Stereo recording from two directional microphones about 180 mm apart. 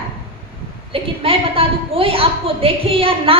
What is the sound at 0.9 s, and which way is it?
A woman's voice, 30° right (ahead or behind).